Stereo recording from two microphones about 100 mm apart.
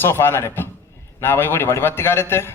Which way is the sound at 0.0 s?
25° left (ahead or behind).